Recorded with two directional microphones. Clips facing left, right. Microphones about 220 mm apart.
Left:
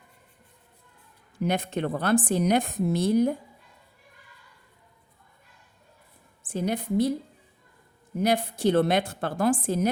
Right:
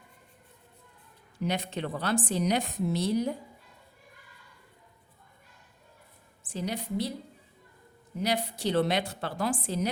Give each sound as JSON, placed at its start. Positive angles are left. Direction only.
{"t": 1.4, "sound": "a woman's voice", "side_deg": 50}
{"t": 6.5, "sound": "a woman's voice", "side_deg": 55}
{"t": 8.2, "sound": "a woman's voice", "side_deg": 50}